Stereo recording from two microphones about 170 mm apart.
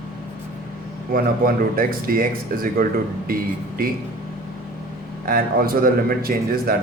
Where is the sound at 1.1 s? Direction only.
55° right (ahead or behind).